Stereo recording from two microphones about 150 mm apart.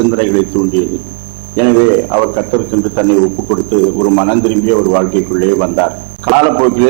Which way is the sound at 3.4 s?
20° right (ahead or behind).